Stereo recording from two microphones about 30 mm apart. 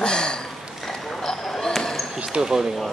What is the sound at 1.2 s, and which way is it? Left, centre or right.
Basketball bounce, left.